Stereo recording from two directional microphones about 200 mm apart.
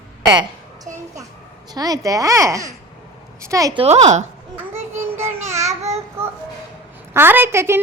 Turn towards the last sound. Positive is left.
turn(degrees=-15)  # may be behind; listen again after turning